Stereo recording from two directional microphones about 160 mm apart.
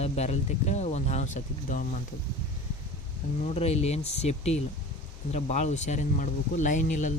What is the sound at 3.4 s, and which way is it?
Speech, 40° left (ahead or behind).